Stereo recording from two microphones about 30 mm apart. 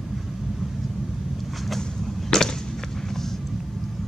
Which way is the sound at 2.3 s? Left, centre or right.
Centre.